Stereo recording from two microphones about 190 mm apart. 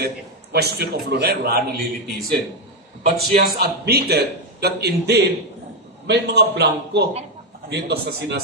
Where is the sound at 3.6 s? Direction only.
55° right (ahead or behind).